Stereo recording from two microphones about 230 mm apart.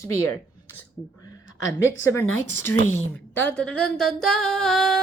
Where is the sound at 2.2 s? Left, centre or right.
Left.